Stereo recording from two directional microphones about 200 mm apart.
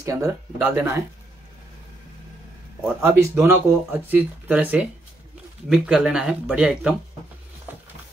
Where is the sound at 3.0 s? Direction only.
15° right (ahead or behind).